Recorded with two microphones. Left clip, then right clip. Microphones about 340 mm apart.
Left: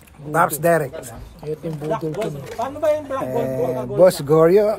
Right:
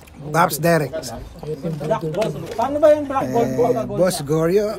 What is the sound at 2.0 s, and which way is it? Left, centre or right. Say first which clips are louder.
Speech: right 3 dB; left.